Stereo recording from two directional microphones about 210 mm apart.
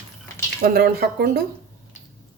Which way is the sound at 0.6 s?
45° right (ahead or behind).